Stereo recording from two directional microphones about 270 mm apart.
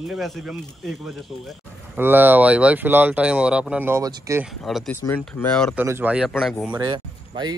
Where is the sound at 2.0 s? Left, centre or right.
Centre.